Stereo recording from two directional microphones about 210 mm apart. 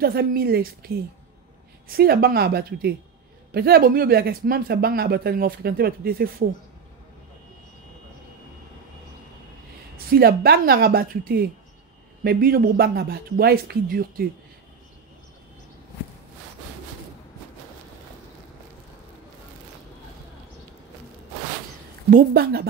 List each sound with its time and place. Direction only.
0.0 s speech: 45° right (ahead or behind)
9.9 s speech: 45° right (ahead or behind)
22.1 s speech: 45° right (ahead or behind)